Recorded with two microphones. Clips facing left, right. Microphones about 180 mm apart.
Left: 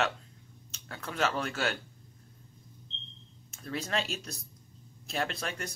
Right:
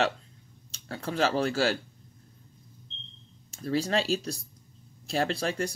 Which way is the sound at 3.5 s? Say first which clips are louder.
Right 7 dB; 35° right (ahead or behind).